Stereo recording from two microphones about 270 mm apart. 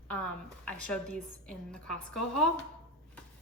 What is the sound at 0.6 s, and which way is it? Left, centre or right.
A woman's voice, centre.